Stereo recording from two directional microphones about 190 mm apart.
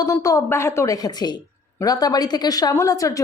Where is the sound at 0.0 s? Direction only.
15° left (ahead or behind).